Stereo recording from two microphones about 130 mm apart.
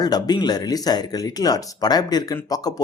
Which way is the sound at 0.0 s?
30° left (ahead or behind).